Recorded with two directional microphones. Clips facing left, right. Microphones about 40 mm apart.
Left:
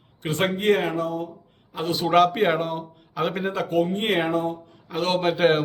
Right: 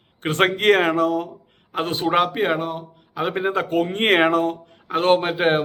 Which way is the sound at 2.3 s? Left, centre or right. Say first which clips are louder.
Even; centre.